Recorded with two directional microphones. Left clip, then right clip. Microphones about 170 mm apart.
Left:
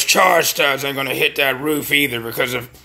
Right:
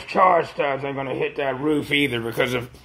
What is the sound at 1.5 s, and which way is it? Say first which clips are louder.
A man's voice: left 4 dB; 10° left (ahead or behind).